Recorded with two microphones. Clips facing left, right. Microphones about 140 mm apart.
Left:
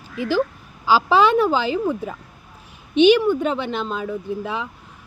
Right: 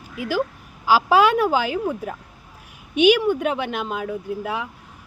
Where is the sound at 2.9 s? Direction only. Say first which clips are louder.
Left 2 dB; 10° right (ahead or behind).